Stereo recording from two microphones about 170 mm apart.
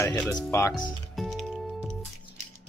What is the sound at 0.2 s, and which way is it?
Speech, 5° left (ahead or behind).